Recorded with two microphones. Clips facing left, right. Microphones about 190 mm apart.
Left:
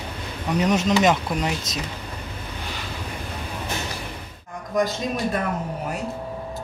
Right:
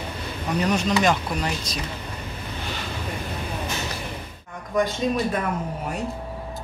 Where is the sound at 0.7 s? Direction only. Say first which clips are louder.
Left 3 dB; 20° left (ahead or behind).